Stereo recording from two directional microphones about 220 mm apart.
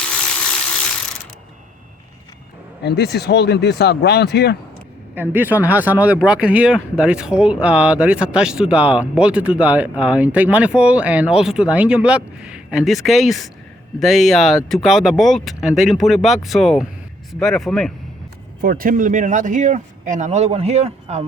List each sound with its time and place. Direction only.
2.8 s speech: 50° left (ahead or behind)
5.1 s speech: 10° right (ahead or behind)
18.6 s speech: 40° right (ahead or behind)